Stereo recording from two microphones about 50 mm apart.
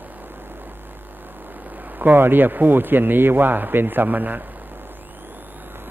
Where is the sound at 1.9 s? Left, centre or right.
Right.